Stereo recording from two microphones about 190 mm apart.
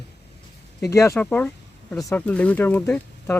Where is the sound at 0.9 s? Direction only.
15° left (ahead or behind).